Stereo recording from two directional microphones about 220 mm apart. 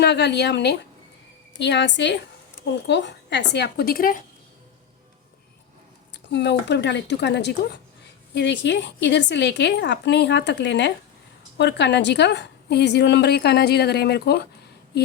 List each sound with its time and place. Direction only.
0.0 s a woman's voice: 50° left (ahead or behind)
6.3 s a woman's voice: 50° left (ahead or behind)